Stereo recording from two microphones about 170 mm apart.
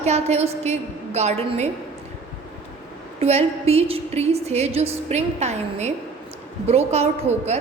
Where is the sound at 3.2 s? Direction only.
40° right (ahead or behind).